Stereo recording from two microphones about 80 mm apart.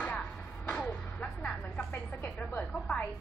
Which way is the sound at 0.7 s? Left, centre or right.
Centre.